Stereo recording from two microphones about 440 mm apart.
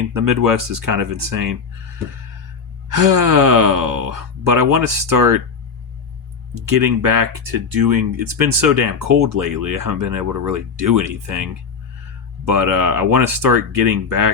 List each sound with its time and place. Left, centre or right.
0.1 s speech: right
2.9 s speech: right
6.5 s speech: right
12.5 s speech: right